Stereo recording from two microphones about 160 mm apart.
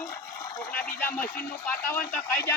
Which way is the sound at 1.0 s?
15° left (ahead or behind).